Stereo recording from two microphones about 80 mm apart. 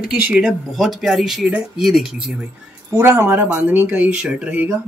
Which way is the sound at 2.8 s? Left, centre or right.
Right.